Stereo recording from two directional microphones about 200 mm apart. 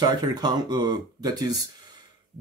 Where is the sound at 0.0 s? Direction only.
20° right (ahead or behind).